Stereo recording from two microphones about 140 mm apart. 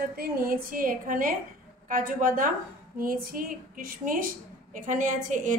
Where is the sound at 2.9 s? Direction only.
90° right.